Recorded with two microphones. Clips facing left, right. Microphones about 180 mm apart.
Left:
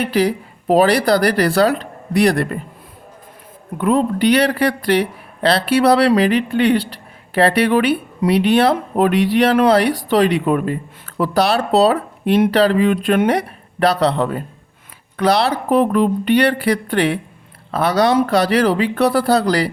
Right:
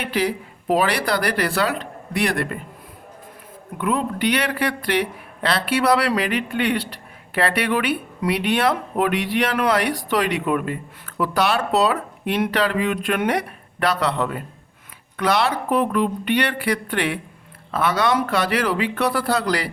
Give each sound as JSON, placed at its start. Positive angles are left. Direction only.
{"t": 0.0, "sound": "speech", "side_deg": 35}
{"t": 3.8, "sound": "speech", "side_deg": 35}